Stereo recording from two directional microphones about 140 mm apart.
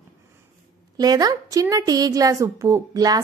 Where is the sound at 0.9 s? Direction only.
25° right (ahead or behind).